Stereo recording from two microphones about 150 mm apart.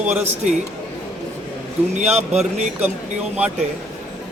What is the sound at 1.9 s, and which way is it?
Speech, 50° right (ahead or behind).